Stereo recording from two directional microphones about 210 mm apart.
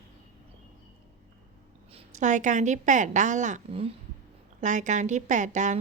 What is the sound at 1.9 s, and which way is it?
A woman's voice, 35° right (ahead or behind).